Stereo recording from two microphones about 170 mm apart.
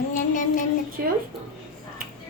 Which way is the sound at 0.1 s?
50° left (ahead or behind).